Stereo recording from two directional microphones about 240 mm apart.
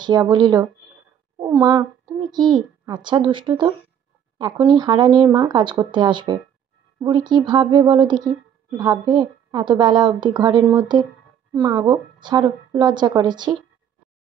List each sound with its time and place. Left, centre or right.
0.0 s a woman's voice: centre